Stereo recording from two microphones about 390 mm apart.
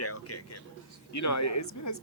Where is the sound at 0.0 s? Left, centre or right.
Left.